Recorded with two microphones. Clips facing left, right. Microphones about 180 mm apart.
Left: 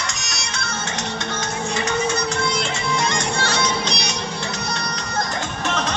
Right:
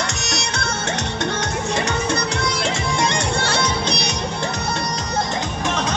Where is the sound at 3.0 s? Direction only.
65° right (ahead or behind).